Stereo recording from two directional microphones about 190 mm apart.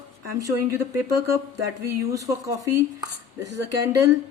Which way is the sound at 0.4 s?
15° right (ahead or behind).